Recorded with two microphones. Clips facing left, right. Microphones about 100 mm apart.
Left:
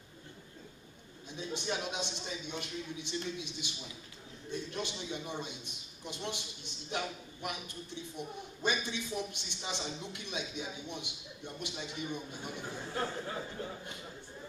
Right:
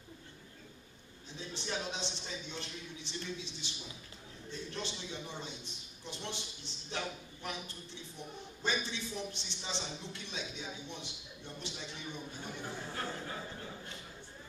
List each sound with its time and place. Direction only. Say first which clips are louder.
1.3 s a man's voice: left 3 dB; 15° left (ahead or behind)